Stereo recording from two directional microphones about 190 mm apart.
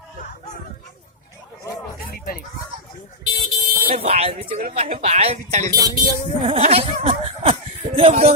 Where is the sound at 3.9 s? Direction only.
35° right (ahead or behind).